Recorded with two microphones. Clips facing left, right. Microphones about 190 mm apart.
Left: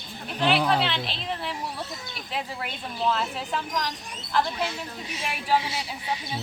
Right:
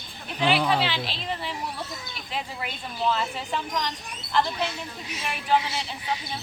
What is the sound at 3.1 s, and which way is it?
Speech, centre (ahead or behind).